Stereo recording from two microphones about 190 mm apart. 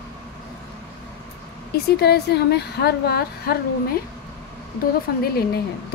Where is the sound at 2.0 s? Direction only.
55° left (ahead or behind).